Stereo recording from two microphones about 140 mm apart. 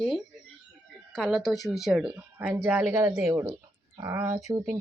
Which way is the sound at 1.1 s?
5° left (ahead or behind).